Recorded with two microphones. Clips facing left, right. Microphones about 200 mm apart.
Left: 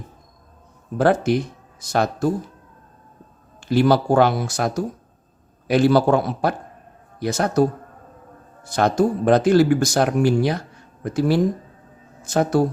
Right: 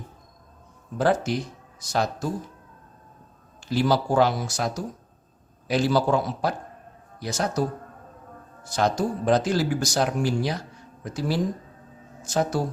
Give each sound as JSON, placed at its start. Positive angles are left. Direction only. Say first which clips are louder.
{"t": 0.9, "sound": "speech", "louder": "left 5 dB", "side_deg": 60}
{"t": 3.6, "sound": "speech", "louder": "left 6 dB", "side_deg": 60}
{"t": 8.6, "sound": "speech", "louder": "left 6 dB", "side_deg": 60}